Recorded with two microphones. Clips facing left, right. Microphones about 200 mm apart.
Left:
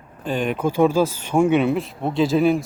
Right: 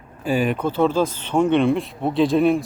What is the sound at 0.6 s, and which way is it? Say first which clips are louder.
Speech: left 2 dB; 10° left (ahead or behind).